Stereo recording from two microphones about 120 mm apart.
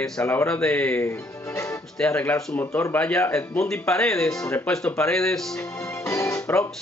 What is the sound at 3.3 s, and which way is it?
Speech, 5° left (ahead or behind).